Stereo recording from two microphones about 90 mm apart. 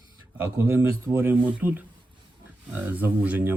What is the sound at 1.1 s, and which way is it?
Speech, 20° right (ahead or behind).